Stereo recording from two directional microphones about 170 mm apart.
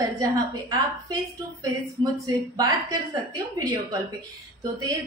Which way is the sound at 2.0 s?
20° right (ahead or behind).